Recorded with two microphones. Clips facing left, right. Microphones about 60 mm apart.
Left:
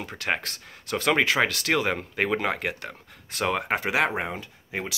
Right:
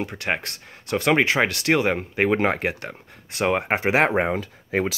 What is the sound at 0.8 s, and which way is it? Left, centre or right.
Speech, right.